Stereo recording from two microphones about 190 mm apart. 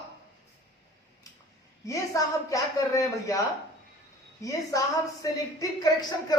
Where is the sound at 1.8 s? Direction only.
15° left (ahead or behind).